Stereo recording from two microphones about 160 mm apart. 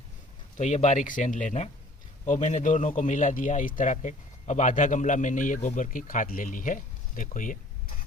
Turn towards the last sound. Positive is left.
turn(degrees=55)  # may be behind; listen again after turning